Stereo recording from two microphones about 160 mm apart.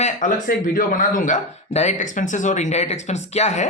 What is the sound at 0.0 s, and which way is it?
Speech, 55° left (ahead or behind).